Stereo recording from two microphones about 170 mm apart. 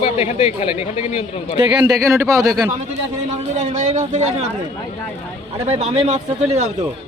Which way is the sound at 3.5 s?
40° right (ahead or behind).